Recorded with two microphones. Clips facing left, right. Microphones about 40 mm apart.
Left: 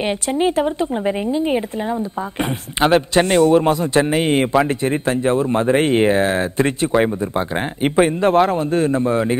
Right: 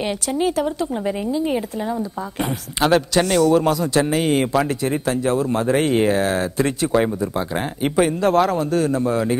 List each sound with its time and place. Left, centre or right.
0.0 s a woman's voice: left